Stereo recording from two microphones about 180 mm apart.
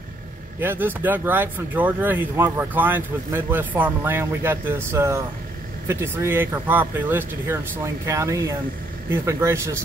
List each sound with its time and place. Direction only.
0.6 s speech: 10° right (ahead or behind)